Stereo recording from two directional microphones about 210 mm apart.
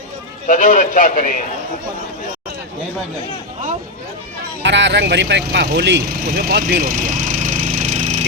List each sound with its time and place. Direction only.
0.4 s a man's voice: 40° left (ahead or behind)
4.6 s speech: 55° right (ahead or behind); by 8.2 s 35° right (ahead or behind)